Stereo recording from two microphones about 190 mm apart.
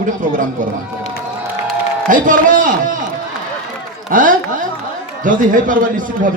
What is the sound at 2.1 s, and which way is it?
Speech, 45° right (ahead or behind).